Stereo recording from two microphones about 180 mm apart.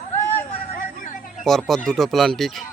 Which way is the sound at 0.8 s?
45° left (ahead or behind).